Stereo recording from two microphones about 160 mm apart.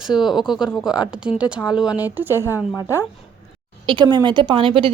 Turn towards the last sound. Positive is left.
turn(degrees=-35)  # may be behind; listen again after turning